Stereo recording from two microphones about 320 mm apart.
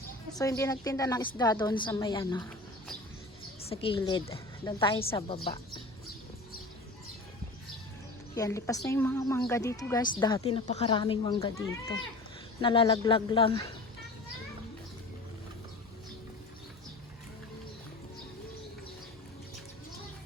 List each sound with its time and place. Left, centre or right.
0.3 s a woman's voice: centre
3.7 s a woman's voice: centre
8.4 s a woman's voice: centre